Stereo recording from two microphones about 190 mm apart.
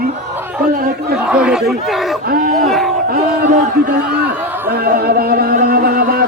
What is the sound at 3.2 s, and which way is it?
Speech, 40° right (ahead or behind).